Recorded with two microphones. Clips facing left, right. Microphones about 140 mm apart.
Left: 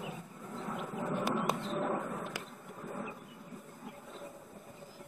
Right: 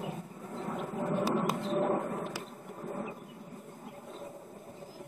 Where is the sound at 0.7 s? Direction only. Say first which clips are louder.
Right 4 dB; centre (ahead or behind).